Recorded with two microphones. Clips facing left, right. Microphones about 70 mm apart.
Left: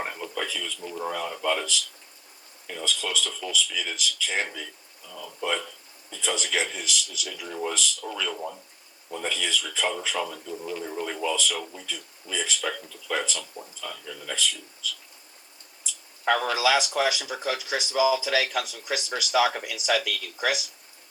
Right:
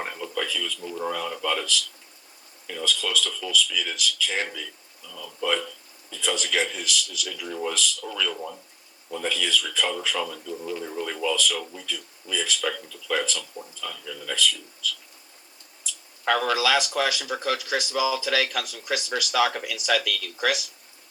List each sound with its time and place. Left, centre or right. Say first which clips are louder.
0.1 s a sound: right 2 dB; centre
1.0 s speech: even; centre
10.5 s a man's voice: right 1 dB; centre; by 11.6 s left
11.6 s a man's voice: right 1 dB; centre
11.9 s speech: right 3 dB; left